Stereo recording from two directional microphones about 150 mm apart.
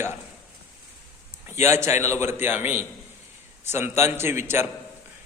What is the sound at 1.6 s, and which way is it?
A man's voice, 15° right (ahead or behind).